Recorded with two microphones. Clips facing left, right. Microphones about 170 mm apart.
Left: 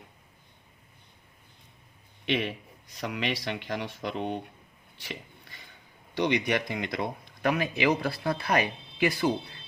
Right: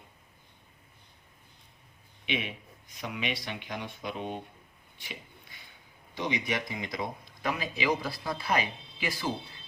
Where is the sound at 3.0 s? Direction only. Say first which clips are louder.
Left 4 dB; 80° left.